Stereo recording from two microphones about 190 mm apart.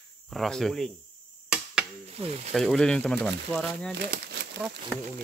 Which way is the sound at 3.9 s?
60° right (ahead or behind).